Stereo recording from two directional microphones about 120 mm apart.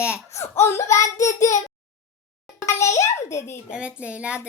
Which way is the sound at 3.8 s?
10° right (ahead or behind).